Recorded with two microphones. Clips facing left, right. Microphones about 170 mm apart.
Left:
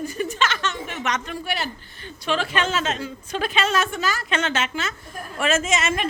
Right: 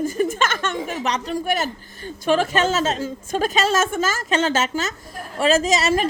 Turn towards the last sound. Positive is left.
turn(degrees=-35)  # may be behind; listen again after turning